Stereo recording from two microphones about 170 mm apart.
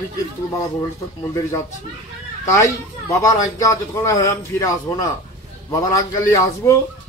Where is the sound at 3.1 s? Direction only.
20° left (ahead or behind).